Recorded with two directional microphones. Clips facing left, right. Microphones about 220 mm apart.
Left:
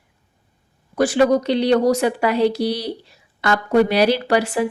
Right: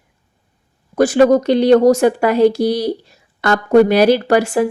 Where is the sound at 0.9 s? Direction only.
45° right (ahead or behind).